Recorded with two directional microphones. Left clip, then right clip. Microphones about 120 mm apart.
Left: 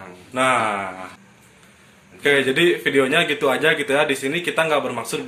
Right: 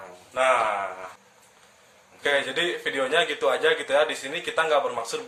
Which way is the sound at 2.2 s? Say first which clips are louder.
Left 7 dB; 25° left (ahead or behind).